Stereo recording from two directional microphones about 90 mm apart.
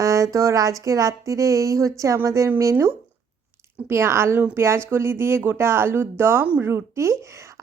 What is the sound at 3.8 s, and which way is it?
Speech, 30° right (ahead or behind).